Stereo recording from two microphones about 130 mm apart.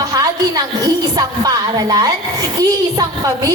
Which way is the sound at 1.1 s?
30° right (ahead or behind).